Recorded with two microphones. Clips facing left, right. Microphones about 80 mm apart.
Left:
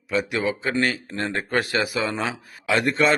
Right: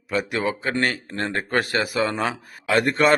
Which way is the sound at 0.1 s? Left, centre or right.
Right.